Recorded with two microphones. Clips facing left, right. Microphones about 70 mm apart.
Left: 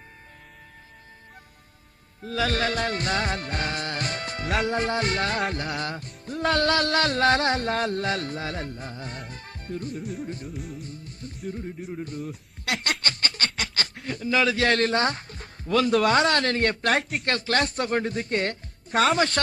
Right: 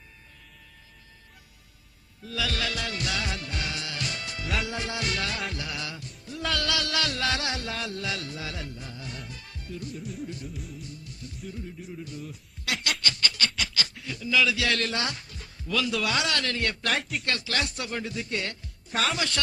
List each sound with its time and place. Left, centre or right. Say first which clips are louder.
2.2 s music: left 6 dB; left
10.0 s music: left 4 dB; centre
10.2 s music: left 3 dB; left
10.5 s music: left 5 dB; centre
10.8 s music: left 3 dB; left
11.4 s speech: left 6 dB; left
12.6 s snicker: left 3 dB; left
13.0 s snicker: left 1 dB; left
16.9 s speech: left 5 dB; left
17.2 s speech: left 7 dB; left